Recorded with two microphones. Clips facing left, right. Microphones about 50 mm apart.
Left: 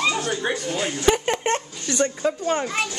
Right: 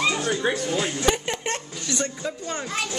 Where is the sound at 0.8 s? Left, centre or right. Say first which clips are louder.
Left 5 dB; centre.